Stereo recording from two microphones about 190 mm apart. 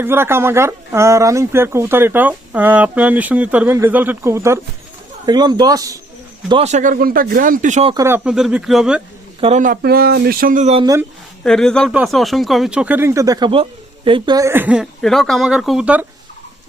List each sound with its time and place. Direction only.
0.0 s speech: 10° right (ahead or behind)
6.5 s speech: 35° right (ahead or behind)
7.9 s speech: 15° right (ahead or behind)
9.4 s speech: 40° right (ahead or behind)
11.4 s speech: 5° left (ahead or behind)